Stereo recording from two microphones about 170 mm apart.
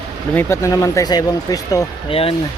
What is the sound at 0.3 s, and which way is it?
Speech, 15° left (ahead or behind).